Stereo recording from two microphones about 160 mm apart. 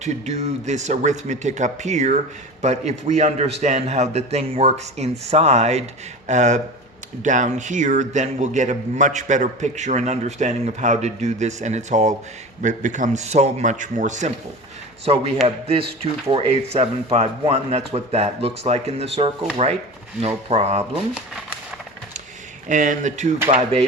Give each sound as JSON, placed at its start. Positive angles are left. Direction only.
{"t": 0.0, "sound": "a man's voice", "side_deg": -45}
{"t": 22.7, "sound": "a man's voice", "side_deg": -55}